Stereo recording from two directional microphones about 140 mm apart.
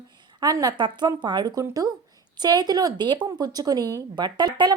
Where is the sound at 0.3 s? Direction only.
25° right (ahead or behind).